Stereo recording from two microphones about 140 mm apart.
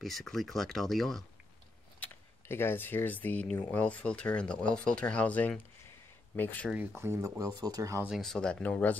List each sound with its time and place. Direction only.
0.0 s speech: centre (ahead or behind)
2.0 s speech: 15° left (ahead or behind)
6.7 s speech: 15° right (ahead or behind)
8.2 s speech: 5° left (ahead or behind)